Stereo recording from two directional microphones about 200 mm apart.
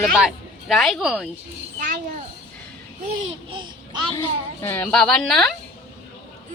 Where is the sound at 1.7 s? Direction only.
40° right (ahead or behind).